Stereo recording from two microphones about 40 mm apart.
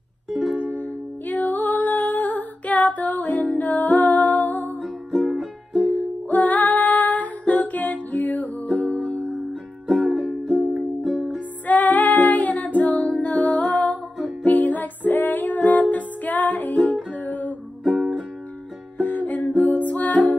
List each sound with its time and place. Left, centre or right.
0.6 s music: left
5.2 s music: centre
5.9 s music: left
9.8 s music: centre
11.6 s music: left
17.8 s music: centre
18.9 s music: left